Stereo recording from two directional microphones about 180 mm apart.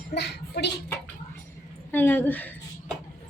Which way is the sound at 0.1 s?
70° left (ahead or behind).